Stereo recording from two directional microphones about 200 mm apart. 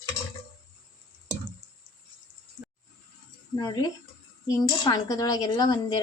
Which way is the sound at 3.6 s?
20° left (ahead or behind).